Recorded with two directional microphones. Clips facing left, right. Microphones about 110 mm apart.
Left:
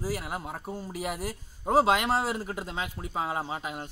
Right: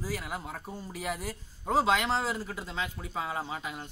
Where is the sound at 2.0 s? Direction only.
50° left (ahead or behind).